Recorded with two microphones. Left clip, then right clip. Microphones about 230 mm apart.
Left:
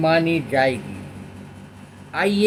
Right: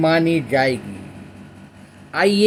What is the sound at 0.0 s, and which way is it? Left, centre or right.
Speech, right.